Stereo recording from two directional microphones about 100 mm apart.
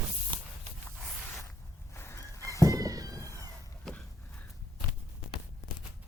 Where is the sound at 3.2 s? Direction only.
25° left (ahead or behind).